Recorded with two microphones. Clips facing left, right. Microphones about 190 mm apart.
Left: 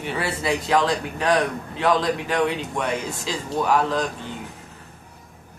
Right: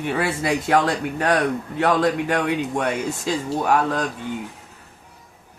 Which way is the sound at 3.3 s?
50° right (ahead or behind).